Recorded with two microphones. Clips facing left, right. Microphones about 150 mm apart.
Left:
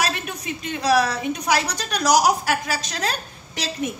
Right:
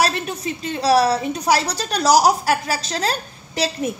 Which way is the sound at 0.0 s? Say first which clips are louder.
Right 5 dB; 35° right (ahead or behind).